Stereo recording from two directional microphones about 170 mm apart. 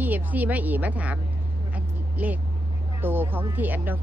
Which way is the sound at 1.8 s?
10° right (ahead or behind).